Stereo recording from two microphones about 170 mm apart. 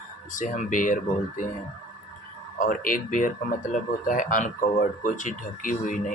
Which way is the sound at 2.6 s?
55° left (ahead or behind).